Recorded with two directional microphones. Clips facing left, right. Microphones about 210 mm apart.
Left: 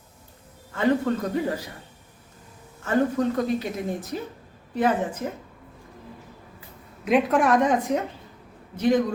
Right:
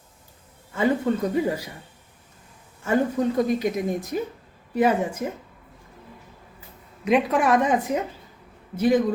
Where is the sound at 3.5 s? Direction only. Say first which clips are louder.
Right 4 dB; 15° right (ahead or behind).